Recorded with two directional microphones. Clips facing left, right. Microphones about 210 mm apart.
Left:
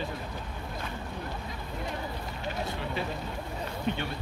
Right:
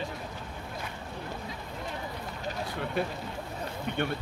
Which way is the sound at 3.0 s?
50° right (ahead or behind).